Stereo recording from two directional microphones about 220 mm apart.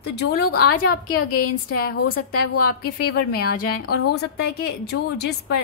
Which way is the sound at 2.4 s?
90° left.